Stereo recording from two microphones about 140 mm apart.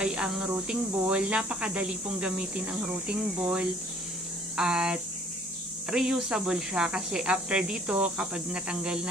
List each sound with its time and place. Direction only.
0.0 s speech: 5° right (ahead or behind)